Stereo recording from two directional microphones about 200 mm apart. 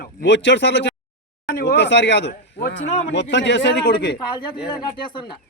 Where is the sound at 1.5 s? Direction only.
50° left (ahead or behind).